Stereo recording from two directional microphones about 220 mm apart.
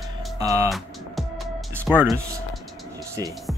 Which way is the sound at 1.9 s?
10° right (ahead or behind).